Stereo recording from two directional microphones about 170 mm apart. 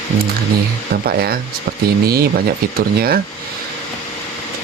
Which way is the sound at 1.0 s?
65° right (ahead or behind).